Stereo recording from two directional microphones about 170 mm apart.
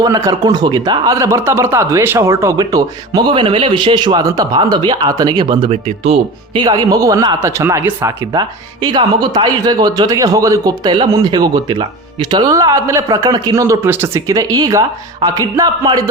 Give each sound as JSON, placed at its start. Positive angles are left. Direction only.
{"t": 0.0, "sound": "speech", "side_deg": -20}